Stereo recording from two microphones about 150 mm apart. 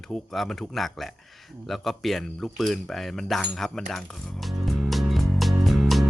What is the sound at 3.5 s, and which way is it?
Music, centre (ahead or behind).